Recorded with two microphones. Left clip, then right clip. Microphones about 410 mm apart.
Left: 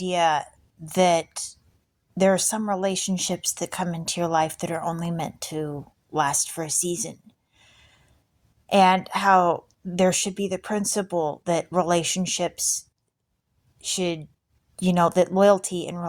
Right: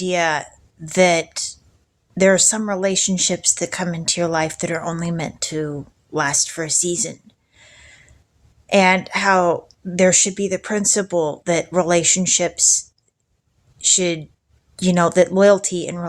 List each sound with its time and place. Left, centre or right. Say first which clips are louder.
0.0 s speech: right 2 dB; left
7.6 s a sound: right 10 dB; left
8.6 s speech: right 3 dB; left
13.8 s speech: right 8 dB; left